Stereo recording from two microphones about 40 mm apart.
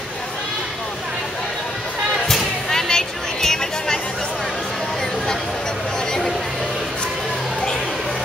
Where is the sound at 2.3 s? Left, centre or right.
Centre.